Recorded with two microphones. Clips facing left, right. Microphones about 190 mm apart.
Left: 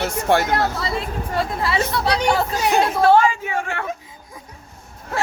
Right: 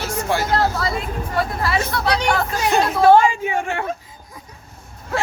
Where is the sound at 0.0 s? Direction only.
60° left (ahead or behind).